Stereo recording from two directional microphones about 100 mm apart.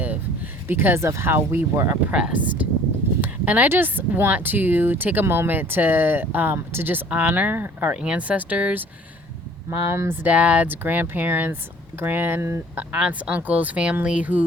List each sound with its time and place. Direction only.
0.7 s speech: 20° right (ahead or behind)
2.1 s speech: 10° right (ahead or behind)
9.9 s speech: 25° right (ahead or behind)